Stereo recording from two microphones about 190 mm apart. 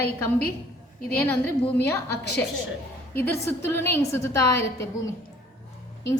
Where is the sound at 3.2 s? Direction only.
10° left (ahead or behind).